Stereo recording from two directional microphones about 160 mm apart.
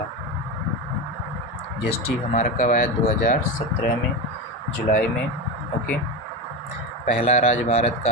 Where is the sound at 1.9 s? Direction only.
45° left (ahead or behind); by 3.3 s 65° left (ahead or behind).